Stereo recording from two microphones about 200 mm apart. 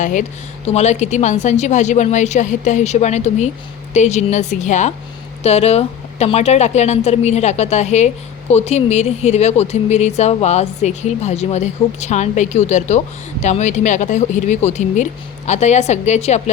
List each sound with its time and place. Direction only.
0.0 s speech: 40° left (ahead or behind)